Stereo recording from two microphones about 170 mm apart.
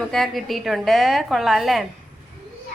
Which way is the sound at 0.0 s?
Centre (ahead or behind).